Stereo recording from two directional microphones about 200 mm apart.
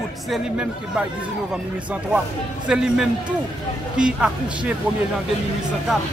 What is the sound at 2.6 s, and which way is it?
Speech, 5° right (ahead or behind).